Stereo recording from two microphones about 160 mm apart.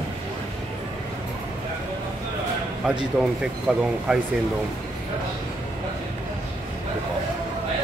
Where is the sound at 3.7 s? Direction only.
5° right (ahead or behind).